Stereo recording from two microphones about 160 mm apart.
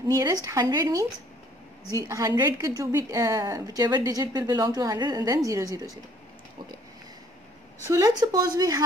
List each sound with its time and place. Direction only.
0.1 s a woman's voice: 20° right (ahead or behind)
7.8 s a woman's voice: 20° right (ahead or behind)